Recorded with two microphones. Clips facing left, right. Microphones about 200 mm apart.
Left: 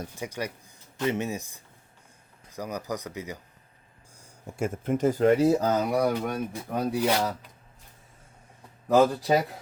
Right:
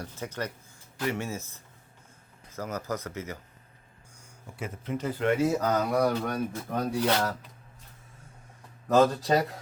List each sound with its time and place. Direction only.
0.0 s speech: 10° left (ahead or behind)
4.4 s speech: 45° left (ahead or behind); by 7.3 s 15° left (ahead or behind)
8.9 s speech: 10° left (ahead or behind)